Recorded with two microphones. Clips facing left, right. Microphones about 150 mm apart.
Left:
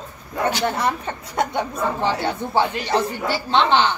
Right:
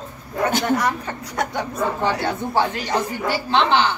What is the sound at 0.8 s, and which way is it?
A woman's voice, 25° left (ahead or behind).